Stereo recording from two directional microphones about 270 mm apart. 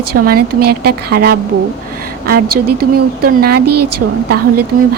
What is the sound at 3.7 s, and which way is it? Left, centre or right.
Speech, right.